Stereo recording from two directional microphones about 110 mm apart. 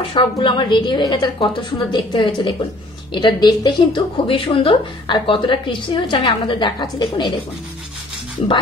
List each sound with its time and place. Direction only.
0.0 s speech: 50° left (ahead or behind)
8.4 s speech: 65° left (ahead or behind)